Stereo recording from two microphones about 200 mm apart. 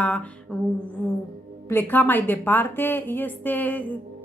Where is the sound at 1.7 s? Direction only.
10° left (ahead or behind).